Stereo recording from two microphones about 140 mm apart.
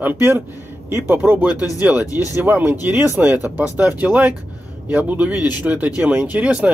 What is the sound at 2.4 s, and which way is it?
Speech, 10° right (ahead or behind).